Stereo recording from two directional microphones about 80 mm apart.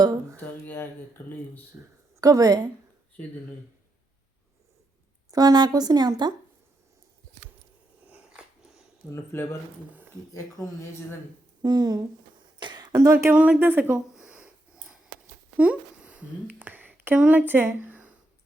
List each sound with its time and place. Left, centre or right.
0.3 s a sound: left
1.7 s speech: right
2.2 s speech: right
5.3 s a woman's voice: right
8.0 s dog: centre
9.0 s speech: left
10.6 s speech: left
11.6 s speech: right
12.4 s a sound: right
13.0 s speech: right
13.3 s speech: centre
13.9 s a sound: centre
15.5 s speech: centre
17.8 s a sound: right